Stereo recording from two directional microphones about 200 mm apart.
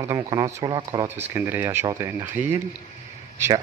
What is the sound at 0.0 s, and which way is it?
Speech, 15° right (ahead or behind).